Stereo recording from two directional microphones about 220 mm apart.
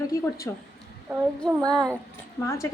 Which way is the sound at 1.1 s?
5° left (ahead or behind).